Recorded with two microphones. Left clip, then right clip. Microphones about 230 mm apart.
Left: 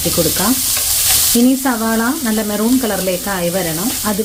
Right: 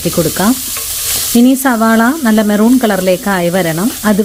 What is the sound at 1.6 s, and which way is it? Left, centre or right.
Speech, right.